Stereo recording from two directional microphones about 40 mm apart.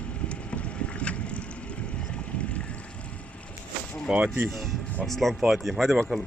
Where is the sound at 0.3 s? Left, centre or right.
Left.